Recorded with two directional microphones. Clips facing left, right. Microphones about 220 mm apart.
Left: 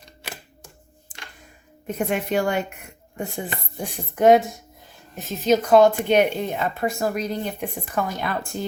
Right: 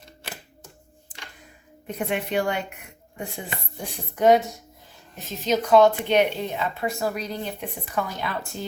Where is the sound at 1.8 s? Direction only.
45° left (ahead or behind).